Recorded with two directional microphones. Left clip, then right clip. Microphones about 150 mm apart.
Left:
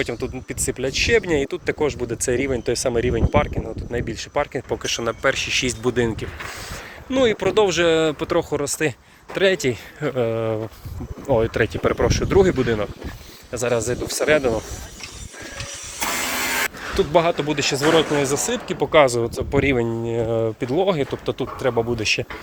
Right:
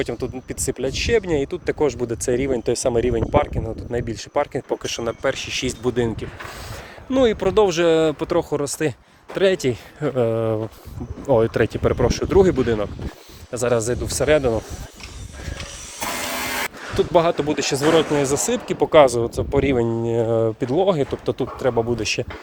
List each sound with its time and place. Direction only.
0.0 s speech: 25° right (ahead or behind)
1.8 s speech: 40° right (ahead or behind)
2.2 s speech: 20° right (ahead or behind)
7.1 s speech: 45° right (ahead or behind)
8.3 s speech: 30° right (ahead or behind)
10.2 s speech: 45° right (ahead or behind)
11.3 s speech: 50° right (ahead or behind)
11.8 s speech: 25° right (ahead or behind)
16.1 s vehicle: 45° right (ahead or behind)
17.0 s speech: 35° right (ahead or behind)
17.3 s speech: 45° right (ahead or behind)
17.8 s speech: 25° right (ahead or behind); by 19.0 s 45° right (ahead or behind)
19.0 s speech: 20° right (ahead or behind); by 21.5 s 35° right (ahead or behind)
21.6 s speech: 25° right (ahead or behind)